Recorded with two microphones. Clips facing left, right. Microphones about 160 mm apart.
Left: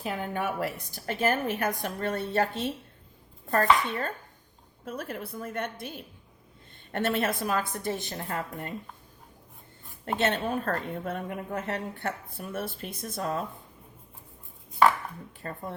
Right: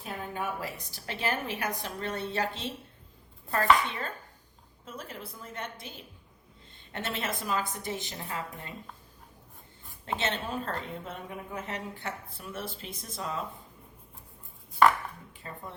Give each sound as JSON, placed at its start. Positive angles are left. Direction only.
{"t": 0.0, "sound": "a woman's voice", "side_deg": 85}
{"t": 4.9, "sound": "a woman's voice", "side_deg": 60}
{"t": 6.9, "sound": "a woman's voice", "side_deg": 55}
{"t": 10.2, "sound": "a woman's voice", "side_deg": 55}
{"t": 15.4, "sound": "a woman's voice", "side_deg": 50}